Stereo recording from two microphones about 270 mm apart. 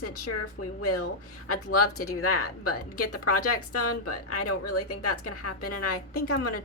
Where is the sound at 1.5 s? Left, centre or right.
Left.